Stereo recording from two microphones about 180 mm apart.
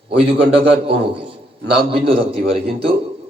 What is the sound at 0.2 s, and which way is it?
Speech, 30° right (ahead or behind).